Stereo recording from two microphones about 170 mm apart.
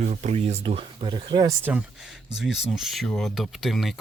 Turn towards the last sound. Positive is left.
turn(degrees=0)  # may be behind; listen again after turning